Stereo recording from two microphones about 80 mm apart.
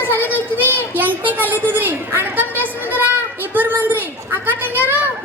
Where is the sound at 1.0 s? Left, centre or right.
Right.